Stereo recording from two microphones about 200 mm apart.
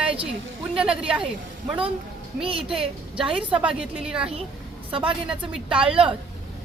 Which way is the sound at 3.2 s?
5° right (ahead or behind).